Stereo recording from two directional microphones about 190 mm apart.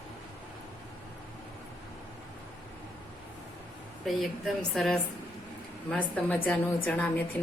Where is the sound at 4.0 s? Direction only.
Centre (ahead or behind).